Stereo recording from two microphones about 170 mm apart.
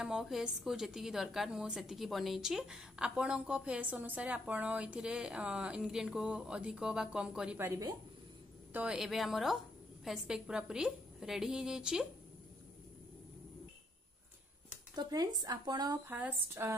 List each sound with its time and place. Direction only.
0.0 s a woman's voice: centre (ahead or behind)
8.7 s a woman's voice: 5° right (ahead or behind)
15.0 s speech: 20° right (ahead or behind)
16.1 s speech: 10° right (ahead or behind)